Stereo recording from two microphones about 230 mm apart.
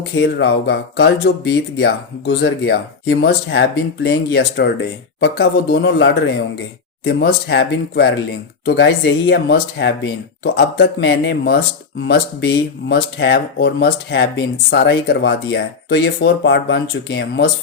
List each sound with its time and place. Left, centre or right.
0.0 s speech: left